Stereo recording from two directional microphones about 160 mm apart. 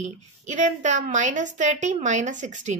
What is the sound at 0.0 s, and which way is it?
A woman's voice, 50° right (ahead or behind).